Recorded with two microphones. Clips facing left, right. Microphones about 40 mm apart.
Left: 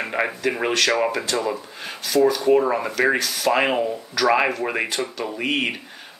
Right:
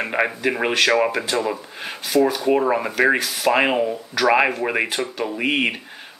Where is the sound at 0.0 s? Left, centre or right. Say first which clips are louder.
Right 2 dB; centre.